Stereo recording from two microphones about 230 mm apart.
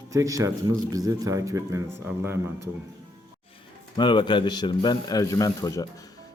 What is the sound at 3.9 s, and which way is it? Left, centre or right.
A man's voice, centre.